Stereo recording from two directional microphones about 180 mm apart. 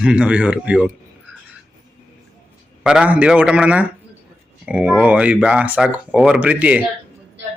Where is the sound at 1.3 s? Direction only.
10° right (ahead or behind).